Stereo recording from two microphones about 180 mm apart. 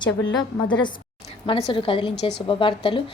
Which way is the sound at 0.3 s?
25° left (ahead or behind).